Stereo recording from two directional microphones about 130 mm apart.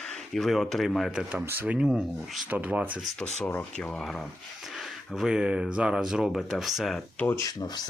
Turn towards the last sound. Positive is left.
turn(degrees=30)  # may be behind; listen again after turning